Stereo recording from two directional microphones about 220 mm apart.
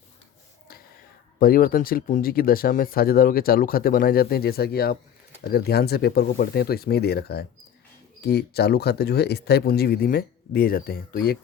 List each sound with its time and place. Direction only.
1.4 s speech: 40° left (ahead or behind)